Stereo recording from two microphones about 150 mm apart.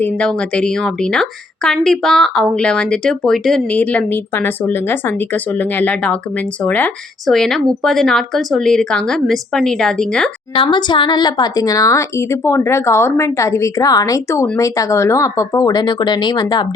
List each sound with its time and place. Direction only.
0.0 s a woman's voice: 5° left (ahead or behind)
10.5 s speech: 30° left (ahead or behind)